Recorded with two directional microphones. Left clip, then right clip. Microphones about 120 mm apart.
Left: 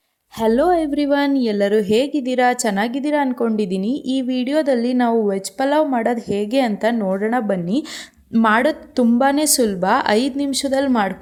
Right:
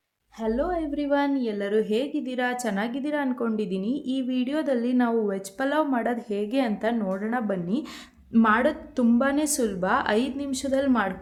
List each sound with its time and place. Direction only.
0.6 s a woman's voice: 90° left; by 7.9 s 70° left (ahead or behind)
8.3 s a woman's voice: 85° left
9.0 s speech: 70° left (ahead or behind)